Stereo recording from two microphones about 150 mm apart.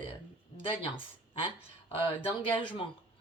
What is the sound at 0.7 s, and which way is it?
Speech, 35° left (ahead or behind).